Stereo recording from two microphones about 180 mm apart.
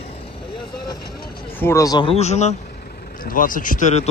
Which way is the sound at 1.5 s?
15° left (ahead or behind).